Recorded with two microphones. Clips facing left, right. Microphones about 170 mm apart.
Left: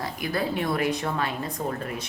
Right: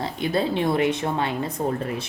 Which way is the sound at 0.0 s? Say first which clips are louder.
Right 4 dB; 25° right (ahead or behind).